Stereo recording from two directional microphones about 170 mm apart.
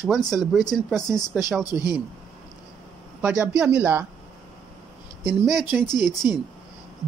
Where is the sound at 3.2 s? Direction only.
5° right (ahead or behind).